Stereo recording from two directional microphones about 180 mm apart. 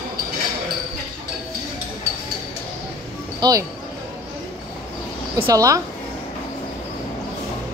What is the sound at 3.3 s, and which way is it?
Speech, 20° right (ahead or behind).